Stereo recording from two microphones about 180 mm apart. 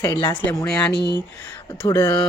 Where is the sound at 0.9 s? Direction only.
70° left (ahead or behind).